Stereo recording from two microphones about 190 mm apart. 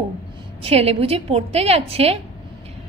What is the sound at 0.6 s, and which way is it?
A woman's voice, 30° right (ahead or behind).